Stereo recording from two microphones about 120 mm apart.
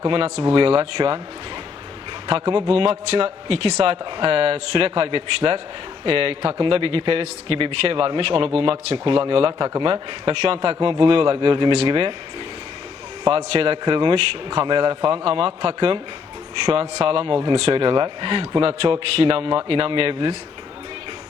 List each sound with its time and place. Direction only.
0.1 s a man's voice: 55° right (ahead or behind)
2.2 s a man's voice: 45° right (ahead or behind)
10.8 s a man's voice: 40° right (ahead or behind)
13.2 s a man's voice: 50° right (ahead or behind)
17.0 s a man's voice: 50° right (ahead or behind)